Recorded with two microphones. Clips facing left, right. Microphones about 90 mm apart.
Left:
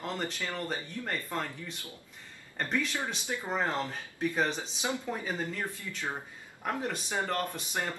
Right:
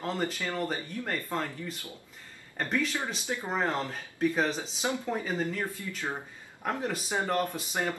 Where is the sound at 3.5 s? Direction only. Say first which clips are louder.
Right 1 dB; centre (ahead or behind).